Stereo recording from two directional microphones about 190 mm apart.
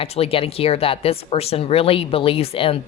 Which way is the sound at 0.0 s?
30° left (ahead or behind).